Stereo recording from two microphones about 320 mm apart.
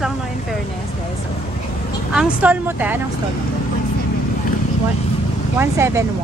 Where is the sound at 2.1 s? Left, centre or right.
Centre.